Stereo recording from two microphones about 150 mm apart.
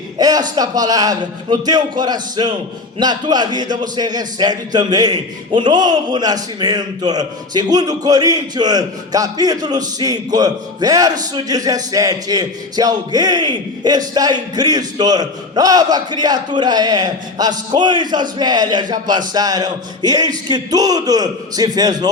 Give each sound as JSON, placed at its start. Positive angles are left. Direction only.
{"t": 0.2, "sound": "a man's voice", "side_deg": -25}